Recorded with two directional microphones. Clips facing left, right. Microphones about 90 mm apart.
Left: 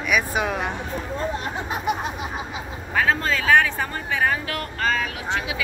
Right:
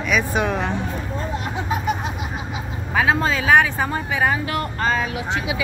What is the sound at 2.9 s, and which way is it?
Speech, 10° right (ahead or behind).